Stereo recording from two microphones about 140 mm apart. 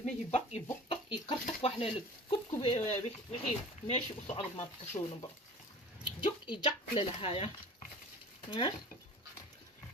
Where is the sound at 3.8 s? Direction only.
50° left (ahead or behind).